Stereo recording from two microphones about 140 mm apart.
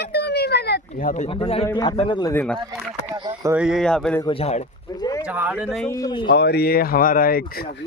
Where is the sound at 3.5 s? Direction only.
5° right (ahead or behind).